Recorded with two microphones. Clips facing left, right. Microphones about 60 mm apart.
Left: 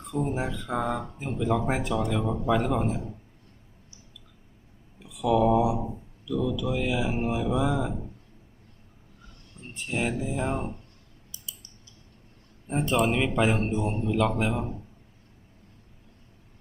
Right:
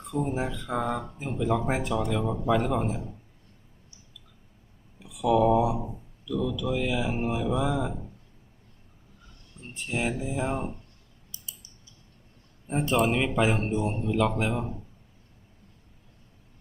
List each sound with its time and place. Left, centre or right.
0.0 s a man's voice: centre
4.9 s speech: centre
9.6 s a man's voice: centre
11.6 s a sound: centre
12.6 s a man's voice: centre